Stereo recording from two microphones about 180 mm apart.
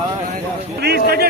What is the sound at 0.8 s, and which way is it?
Speech, 60° right (ahead or behind).